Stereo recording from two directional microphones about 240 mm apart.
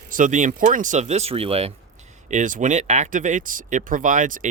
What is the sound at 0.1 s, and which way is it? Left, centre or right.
Speech, right.